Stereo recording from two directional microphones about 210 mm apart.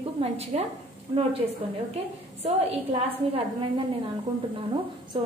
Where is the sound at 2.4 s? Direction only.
30° right (ahead or behind).